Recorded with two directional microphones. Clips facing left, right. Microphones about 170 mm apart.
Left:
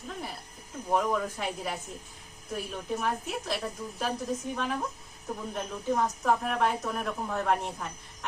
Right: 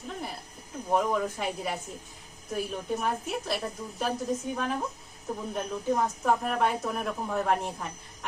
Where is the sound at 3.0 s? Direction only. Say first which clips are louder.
Right 1 dB; centre (ahead or behind).